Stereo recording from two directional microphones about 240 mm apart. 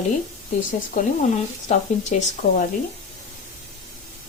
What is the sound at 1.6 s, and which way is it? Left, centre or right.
Speech, left.